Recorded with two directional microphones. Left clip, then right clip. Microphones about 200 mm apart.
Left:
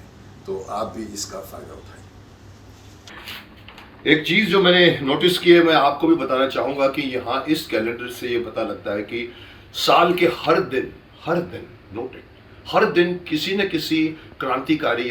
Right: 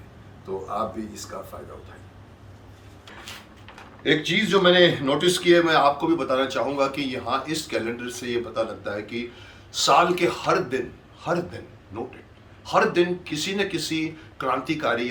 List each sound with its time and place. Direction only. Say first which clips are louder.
0.6 s a man's voice: even; 5° right (ahead or behind)
4.0 s speech: left 5 dB; 10° right (ahead or behind)
12.6 s speech: left 3 dB; 10° right (ahead or behind)